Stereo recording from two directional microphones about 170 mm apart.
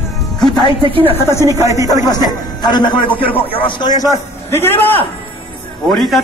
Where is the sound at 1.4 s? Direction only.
20° right (ahead or behind).